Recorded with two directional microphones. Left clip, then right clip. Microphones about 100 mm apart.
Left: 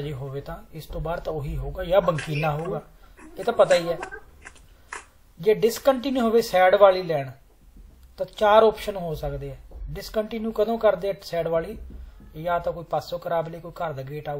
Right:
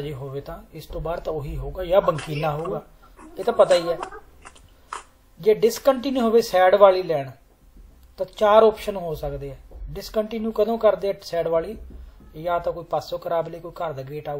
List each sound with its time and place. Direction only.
0.0 s speech: 15° right (ahead or behind)
3.3 s speech: 15° right (ahead or behind)
5.4 s speech: 15° right (ahead or behind)